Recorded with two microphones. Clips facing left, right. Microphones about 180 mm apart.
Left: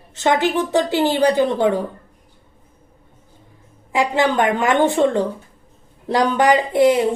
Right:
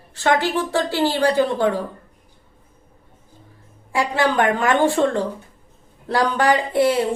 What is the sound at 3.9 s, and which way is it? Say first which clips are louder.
A woman's voice: left 2 dB; 20° left (ahead or behind).